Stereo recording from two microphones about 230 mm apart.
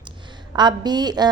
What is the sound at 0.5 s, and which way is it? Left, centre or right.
Speech, centre.